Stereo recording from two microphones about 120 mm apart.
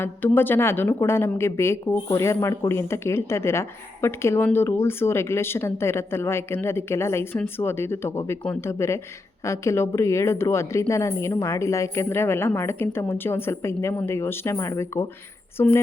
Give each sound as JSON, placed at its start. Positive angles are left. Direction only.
{"t": 0.0, "sound": "a woman's voice", "side_deg": 15}